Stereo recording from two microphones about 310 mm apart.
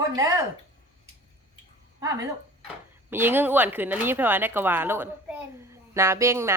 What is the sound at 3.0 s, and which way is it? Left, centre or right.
A woman's voice, centre.